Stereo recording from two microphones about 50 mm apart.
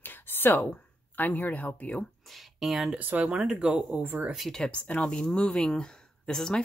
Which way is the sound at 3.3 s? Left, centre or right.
Centre.